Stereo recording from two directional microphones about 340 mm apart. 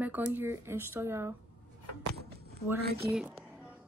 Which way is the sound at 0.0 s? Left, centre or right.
Centre.